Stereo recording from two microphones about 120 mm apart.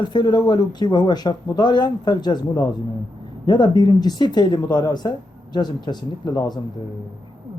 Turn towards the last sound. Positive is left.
turn(degrees=35)  # may be behind; listen again after turning